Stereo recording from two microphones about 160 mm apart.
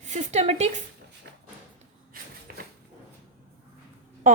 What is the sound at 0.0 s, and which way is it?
Speech, 50° right (ahead or behind).